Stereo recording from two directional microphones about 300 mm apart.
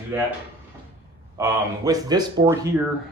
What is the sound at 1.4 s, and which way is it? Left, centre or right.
Speech, centre.